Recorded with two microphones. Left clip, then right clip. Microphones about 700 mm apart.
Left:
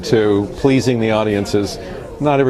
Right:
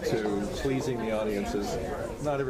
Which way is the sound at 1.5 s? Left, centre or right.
Left.